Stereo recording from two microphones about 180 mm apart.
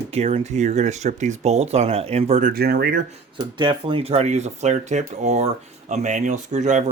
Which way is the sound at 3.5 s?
25° right (ahead or behind).